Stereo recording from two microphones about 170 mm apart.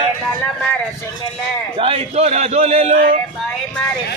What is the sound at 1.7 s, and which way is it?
A man's voice, 35° right (ahead or behind).